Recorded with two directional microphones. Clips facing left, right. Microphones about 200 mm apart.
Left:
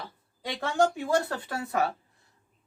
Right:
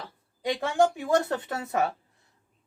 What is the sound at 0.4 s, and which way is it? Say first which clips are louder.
Speech: right 2 dB; 15° right (ahead or behind).